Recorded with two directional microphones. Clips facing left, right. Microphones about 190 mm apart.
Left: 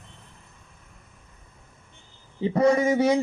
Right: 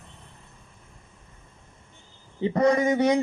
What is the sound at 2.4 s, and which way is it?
Speech, 5° left (ahead or behind).